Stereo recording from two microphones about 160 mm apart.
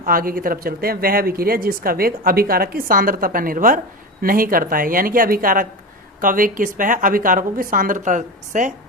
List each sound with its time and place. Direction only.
0.0 s speech: 60° right (ahead or behind)